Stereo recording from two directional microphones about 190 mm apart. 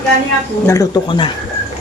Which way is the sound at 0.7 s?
20° left (ahead or behind).